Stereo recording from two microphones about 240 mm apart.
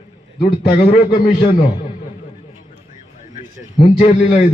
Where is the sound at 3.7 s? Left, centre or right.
Left.